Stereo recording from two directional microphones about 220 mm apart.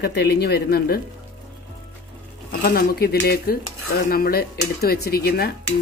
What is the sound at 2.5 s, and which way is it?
Speech, 40° left (ahead or behind).